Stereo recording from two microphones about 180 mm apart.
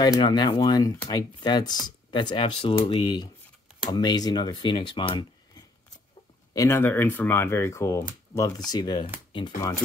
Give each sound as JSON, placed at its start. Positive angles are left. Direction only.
{"t": 0.0, "sound": "speech", "side_deg": 20}
{"t": 6.5, "sound": "speech", "side_deg": 15}